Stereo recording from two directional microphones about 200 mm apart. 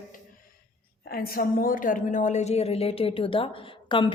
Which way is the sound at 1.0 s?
50° left (ahead or behind).